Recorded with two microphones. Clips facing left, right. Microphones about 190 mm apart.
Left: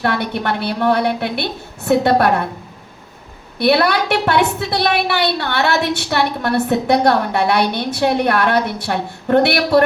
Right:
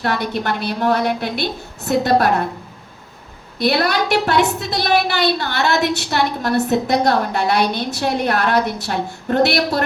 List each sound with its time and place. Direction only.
0.0 s a woman's voice: 60° left (ahead or behind)
3.6 s a woman's voice: 60° left (ahead or behind)